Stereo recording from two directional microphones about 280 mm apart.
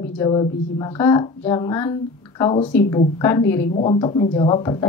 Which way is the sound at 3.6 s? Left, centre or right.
Left.